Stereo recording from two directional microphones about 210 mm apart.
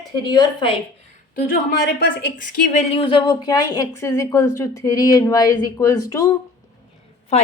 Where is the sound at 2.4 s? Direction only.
35° left (ahead or behind); by 6.3 s 15° left (ahead or behind).